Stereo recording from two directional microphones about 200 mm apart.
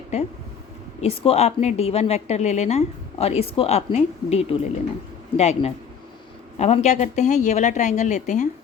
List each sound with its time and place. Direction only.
0.1 s a woman's voice: 30° left (ahead or behind)